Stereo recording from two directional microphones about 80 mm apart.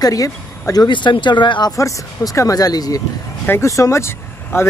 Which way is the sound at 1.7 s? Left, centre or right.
Left.